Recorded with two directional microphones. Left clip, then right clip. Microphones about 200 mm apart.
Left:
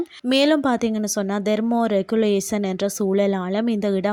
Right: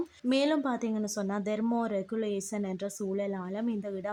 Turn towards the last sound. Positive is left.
turn(degrees=40)  # may be behind; listen again after turning